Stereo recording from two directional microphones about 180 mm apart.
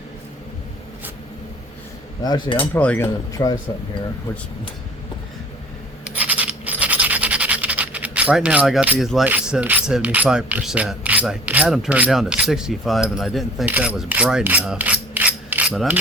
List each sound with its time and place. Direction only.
2.2 s cutlery: 25° left (ahead or behind)
2.7 s cutlery: 10° left (ahead or behind)
6.1 s scratch: 10° right (ahead or behind)
15.7 s mechanisms: centre (ahead or behind)